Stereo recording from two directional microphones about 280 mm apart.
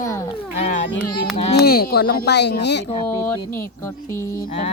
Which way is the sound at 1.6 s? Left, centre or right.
Left.